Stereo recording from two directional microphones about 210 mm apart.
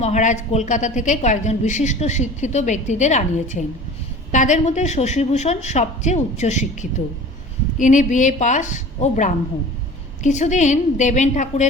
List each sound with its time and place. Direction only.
0.0 s a woman's voice: 35° left (ahead or behind)
7.8 s a woman's voice: 35° left (ahead or behind)